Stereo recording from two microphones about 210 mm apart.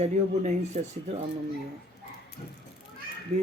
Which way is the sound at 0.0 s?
35° right (ahead or behind).